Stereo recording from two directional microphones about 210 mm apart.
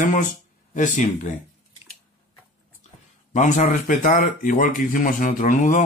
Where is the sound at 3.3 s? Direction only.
35° left (ahead or behind).